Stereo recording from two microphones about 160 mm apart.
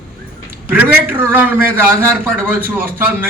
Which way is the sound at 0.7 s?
10° right (ahead or behind).